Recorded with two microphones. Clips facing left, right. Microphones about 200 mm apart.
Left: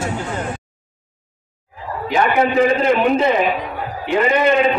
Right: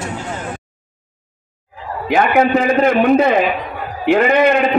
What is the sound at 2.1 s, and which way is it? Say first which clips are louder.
Speech: right 3 dB; 60° right (ahead or behind).